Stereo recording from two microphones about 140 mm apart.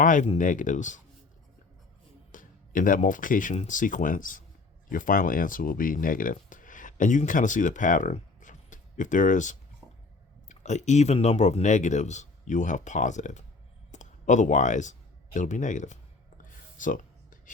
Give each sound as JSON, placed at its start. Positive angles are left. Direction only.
{"t": 0.0, "sound": "speech", "side_deg": 70}
{"t": 2.3, "sound": "speech", "side_deg": 70}
{"t": 16.5, "sound": "a sound", "side_deg": 70}